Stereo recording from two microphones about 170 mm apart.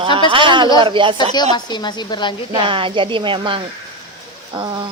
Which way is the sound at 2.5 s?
30° right (ahead or behind).